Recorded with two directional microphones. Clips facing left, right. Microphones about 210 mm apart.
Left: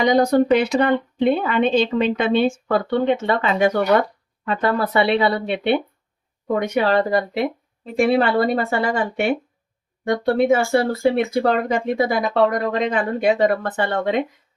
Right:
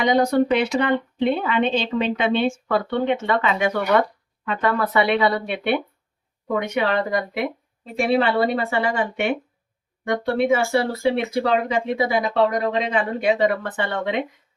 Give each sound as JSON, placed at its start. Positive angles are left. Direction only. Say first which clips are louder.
{"t": 0.0, "sound": "speech", "louder": "left 2 dB", "side_deg": 40}
{"t": 7.9, "sound": "speech", "louder": "left 2 dB", "side_deg": 45}